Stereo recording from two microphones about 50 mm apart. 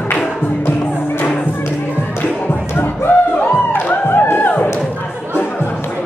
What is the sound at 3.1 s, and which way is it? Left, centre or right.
Music, left.